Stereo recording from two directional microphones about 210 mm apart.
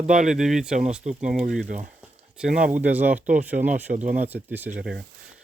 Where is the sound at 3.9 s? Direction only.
40° right (ahead or behind).